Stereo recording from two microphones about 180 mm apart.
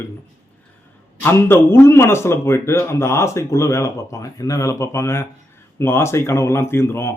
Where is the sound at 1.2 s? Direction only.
10° left (ahead or behind).